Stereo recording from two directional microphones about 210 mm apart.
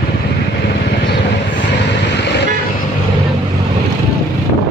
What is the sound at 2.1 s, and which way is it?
Vehicle, 55° left (ahead or behind).